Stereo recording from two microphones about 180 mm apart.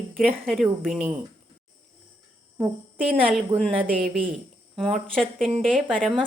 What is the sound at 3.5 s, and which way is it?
Speech, 20° right (ahead or behind).